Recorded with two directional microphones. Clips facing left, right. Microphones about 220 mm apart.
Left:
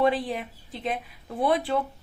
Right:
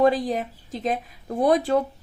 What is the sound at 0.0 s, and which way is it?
A woman's voice, 40° right (ahead or behind).